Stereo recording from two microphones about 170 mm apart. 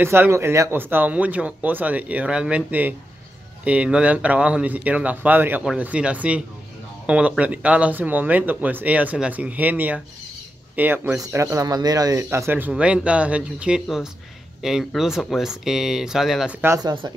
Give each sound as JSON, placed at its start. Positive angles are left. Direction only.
{"t": 0.0, "sound": "speech", "side_deg": -15}
{"t": 16.6, "sound": "speech", "side_deg": -20}